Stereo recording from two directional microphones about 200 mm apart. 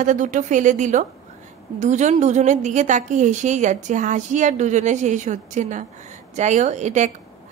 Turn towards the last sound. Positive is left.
turn(degrees=-35)  # may be behind; listen again after turning